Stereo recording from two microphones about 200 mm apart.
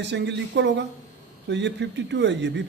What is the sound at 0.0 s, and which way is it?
Mantra, 60° right (ahead or behind).